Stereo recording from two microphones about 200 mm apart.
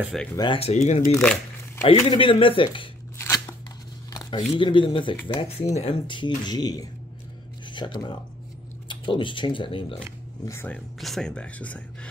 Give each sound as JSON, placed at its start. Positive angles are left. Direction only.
{"t": 0.0, "sound": "speech", "side_deg": 0}
{"t": 0.4, "sound": "speech", "side_deg": 25}
{"t": 1.1, "sound": "speech", "side_deg": 5}
{"t": 1.9, "sound": "speech", "side_deg": 25}
{"t": 3.2, "sound": "scissors", "side_deg": 15}
{"t": 4.1, "sound": "a sound", "side_deg": 20}
{"t": 4.6, "sound": "speech", "side_deg": 25}
{"t": 10.4, "sound": "speech", "side_deg": 10}
{"t": 11.0, "sound": "speech", "side_deg": 0}